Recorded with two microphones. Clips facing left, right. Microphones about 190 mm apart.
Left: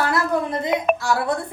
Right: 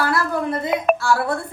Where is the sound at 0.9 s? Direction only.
Centre (ahead or behind).